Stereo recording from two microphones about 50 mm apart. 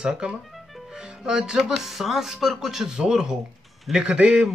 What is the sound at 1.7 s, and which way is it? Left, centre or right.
Speech, centre.